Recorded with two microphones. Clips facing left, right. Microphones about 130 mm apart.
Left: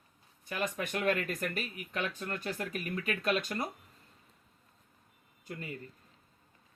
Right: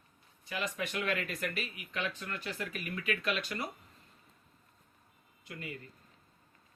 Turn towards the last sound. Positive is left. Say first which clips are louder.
# left 2 dB
turn(degrees=40)  # may be behind; listen again after turning